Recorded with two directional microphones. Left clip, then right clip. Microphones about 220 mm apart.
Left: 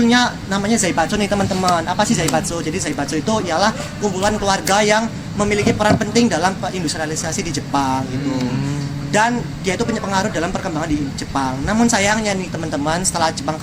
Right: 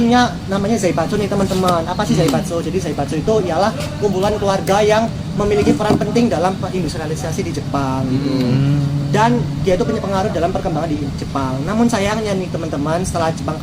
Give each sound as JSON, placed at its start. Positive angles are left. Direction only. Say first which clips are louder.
{"t": 0.1, "sound": "speech", "louder": "right 1 dB", "side_deg": 40}
{"t": 3.2, "sound": "speech", "louder": "right 2 dB", "side_deg": 40}
{"t": 7.7, "sound": "speech", "louder": "left 3 dB", "side_deg": 40}
{"t": 9.1, "sound": "speech", "louder": "right 1 dB", "side_deg": 40}
{"t": 11.8, "sound": "speech", "louder": "left 1 dB", "side_deg": 40}